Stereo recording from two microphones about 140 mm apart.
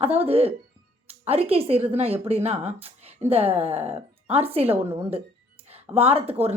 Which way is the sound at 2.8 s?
45° right (ahead or behind).